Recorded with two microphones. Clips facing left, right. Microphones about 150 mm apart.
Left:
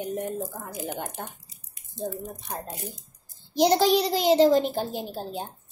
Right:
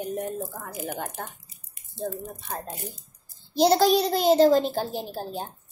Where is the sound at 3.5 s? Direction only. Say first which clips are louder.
Right 1 dB; 15° left (ahead or behind).